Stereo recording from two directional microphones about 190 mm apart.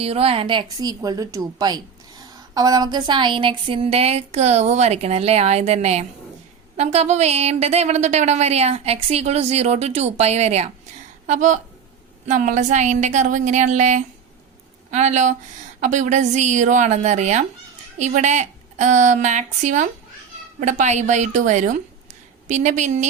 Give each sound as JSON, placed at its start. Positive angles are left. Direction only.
{"t": 0.0, "sound": "a woman's voice", "side_deg": -30}